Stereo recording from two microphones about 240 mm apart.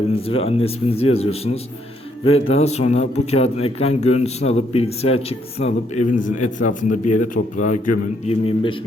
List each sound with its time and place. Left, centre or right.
0.3 s a man's voice: left